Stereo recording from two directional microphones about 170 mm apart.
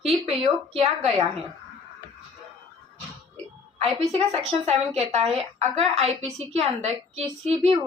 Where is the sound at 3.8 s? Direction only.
35° right (ahead or behind).